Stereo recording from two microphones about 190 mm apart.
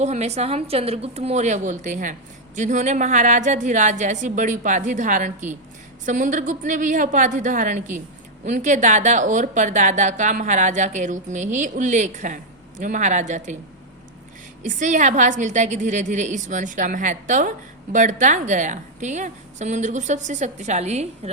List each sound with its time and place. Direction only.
0.0 s a woman's voice: 35° right (ahead or behind)
14.6 s a woman's voice: 40° right (ahead or behind)